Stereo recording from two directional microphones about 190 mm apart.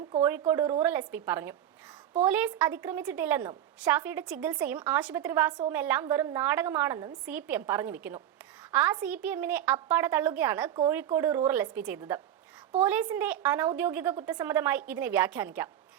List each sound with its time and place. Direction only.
0.3 s a woman's voice: 10° right (ahead or behind)
10.8 s a woman's voice: 20° right (ahead or behind)